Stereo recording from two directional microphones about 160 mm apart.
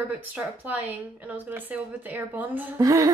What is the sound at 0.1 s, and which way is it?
A woman's voice, 10° right (ahead or behind).